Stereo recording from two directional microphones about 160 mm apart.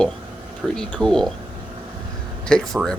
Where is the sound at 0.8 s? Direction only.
5° left (ahead or behind).